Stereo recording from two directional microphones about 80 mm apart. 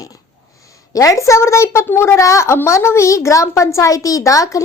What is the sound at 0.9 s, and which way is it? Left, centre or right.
A woman's voice, left.